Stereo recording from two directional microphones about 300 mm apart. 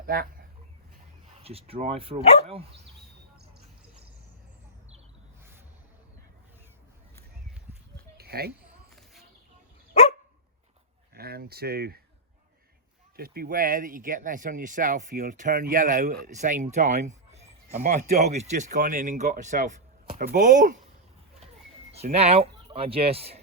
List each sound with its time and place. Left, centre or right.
0.0 s speech: right
1.4 s speech: centre
8.2 s speech: right
9.9 s dog: left
11.1 s speech: right
13.1 s speech: right
16.7 s a sound: right
17.7 s speech: right
21.9 s speech: right